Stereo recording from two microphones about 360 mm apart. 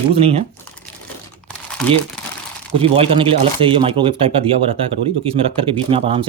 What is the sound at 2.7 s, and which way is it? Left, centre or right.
Speech, centre.